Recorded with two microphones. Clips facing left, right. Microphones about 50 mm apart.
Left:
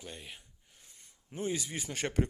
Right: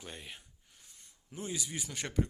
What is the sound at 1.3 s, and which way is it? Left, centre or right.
Speech, left.